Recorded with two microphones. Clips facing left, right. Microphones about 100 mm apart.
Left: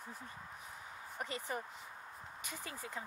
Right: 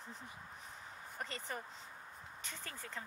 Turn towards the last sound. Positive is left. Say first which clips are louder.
# left 3 dB
turn(degrees=10)  # may be behind; listen again after turning